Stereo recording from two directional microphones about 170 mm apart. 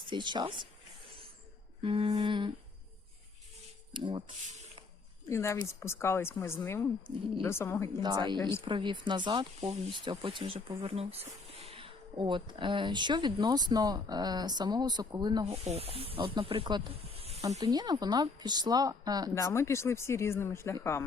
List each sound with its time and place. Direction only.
0.1 s speech: 25° right (ahead or behind)
1.8 s speech: 30° right (ahead or behind)
3.9 s speech: 25° right (ahead or behind)
5.3 s a woman's voice: 15° left (ahead or behind)
8.0 s speech: 25° right (ahead or behind)
8.4 s a woman's voice: 15° left (ahead or behind)
8.6 s speech: 30° right (ahead or behind)
15.4 s speech: 35° right (ahead or behind)
17.6 s speech: 25° right (ahead or behind)
19.3 s a woman's voice: 15° left (ahead or behind)